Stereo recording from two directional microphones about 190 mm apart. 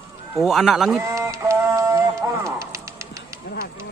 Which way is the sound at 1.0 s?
15° right (ahead or behind).